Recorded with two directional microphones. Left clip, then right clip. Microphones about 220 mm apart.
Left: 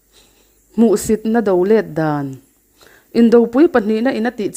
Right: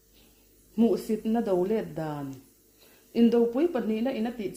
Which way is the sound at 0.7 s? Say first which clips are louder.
Left 12 dB; 45° left (ahead or behind).